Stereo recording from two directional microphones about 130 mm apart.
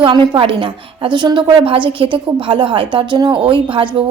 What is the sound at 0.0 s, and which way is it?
A woman's voice, 40° right (ahead or behind).